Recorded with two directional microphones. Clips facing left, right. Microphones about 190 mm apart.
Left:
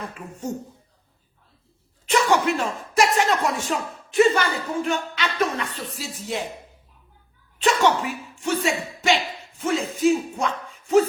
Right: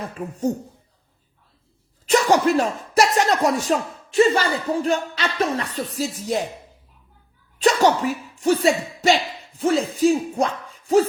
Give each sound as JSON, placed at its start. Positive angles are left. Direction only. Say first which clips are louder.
{"t": 0.5, "sound": "speech", "louder": "right 5 dB", "side_deg": -35}
{"t": 2.0, "sound": "speech", "louder": "right 3 dB", "side_deg": -40}
{"t": 7.6, "sound": "speech", "louder": "right 3 dB", "side_deg": -40}